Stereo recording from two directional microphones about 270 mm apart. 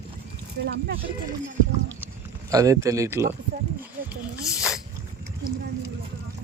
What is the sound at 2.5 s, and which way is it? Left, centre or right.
Speech, centre.